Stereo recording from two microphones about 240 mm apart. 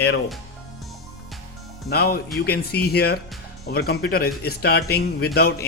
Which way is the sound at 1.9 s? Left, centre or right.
Left.